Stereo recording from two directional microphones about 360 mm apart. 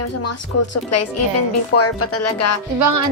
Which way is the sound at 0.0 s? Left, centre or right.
Left.